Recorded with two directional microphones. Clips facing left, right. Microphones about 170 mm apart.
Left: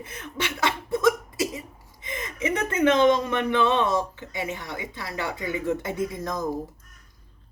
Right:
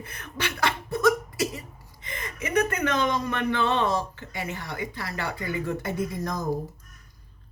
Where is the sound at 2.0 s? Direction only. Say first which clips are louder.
Left 5 dB; 20° left (ahead or behind).